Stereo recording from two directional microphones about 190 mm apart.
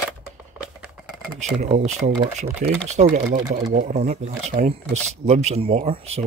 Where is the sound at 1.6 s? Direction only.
35° right (ahead or behind).